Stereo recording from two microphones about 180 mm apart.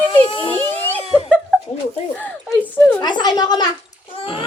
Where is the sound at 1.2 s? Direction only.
10° left (ahead or behind).